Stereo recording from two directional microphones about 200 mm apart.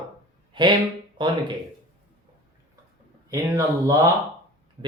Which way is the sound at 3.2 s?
15° right (ahead or behind).